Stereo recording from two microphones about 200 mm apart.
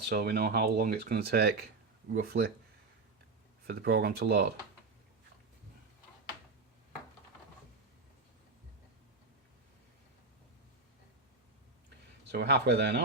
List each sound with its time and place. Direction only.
0.1 s speech: 50° right (ahead or behind)
3.7 s speech: 55° right (ahead or behind)
12.3 s speech: 55° right (ahead or behind)